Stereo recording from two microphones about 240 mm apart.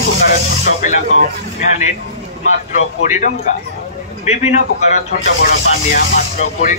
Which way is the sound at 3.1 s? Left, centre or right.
Left.